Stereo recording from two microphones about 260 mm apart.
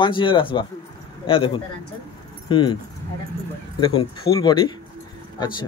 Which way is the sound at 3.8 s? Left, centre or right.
Centre.